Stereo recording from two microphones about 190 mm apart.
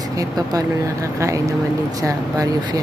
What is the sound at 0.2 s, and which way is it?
Speech, 20° right (ahead or behind).